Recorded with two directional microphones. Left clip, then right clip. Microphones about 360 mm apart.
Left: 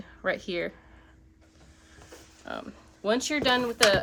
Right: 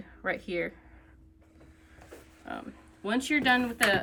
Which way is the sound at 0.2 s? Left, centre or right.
Centre.